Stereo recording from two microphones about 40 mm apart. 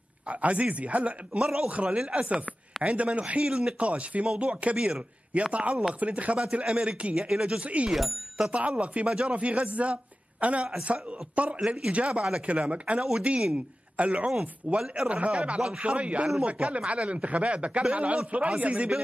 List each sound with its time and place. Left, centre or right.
0.3 s speech: right
1.4 s speech: centre
1.7 s speech: right
3.4 s speech: centre
3.8 s speech: right
7.9 s speech: centre
8.5 s speech: right
11.6 s speech: centre
11.9 s speech: right